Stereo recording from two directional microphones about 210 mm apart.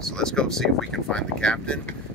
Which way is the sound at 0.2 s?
Centre (ahead or behind).